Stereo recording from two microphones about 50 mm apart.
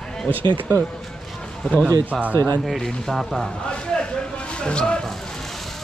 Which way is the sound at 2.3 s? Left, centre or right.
Left.